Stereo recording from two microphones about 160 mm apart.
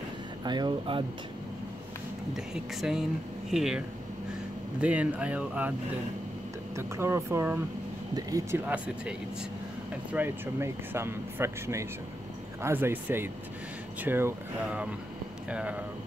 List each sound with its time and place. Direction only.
0.4 s speech: 30° right (ahead or behind)
2.3 s speech: centre (ahead or behind)
6.8 s speech: 15° right (ahead or behind)
10.1 s speech: 15° right (ahead or behind)